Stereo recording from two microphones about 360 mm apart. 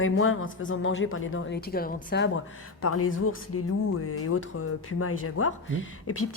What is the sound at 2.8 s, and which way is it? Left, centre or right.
Speech, left.